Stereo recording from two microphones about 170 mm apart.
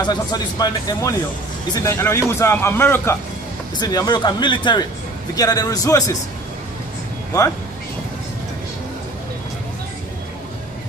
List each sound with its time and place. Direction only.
0.0 s a man's voice: 25° left (ahead or behind)